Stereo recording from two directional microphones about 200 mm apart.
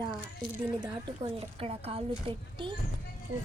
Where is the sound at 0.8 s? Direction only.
25° right (ahead or behind).